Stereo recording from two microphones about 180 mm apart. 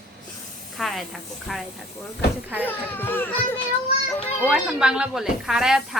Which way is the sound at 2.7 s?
10° left (ahead or behind).